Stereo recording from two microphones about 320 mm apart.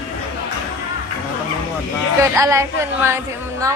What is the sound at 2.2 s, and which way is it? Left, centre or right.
A woman's voice, centre.